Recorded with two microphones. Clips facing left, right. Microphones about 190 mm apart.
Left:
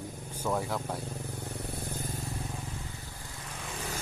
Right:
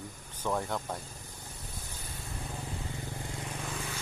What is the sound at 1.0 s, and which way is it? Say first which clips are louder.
Vehicle: left 10 dB; 60° left (ahead or behind).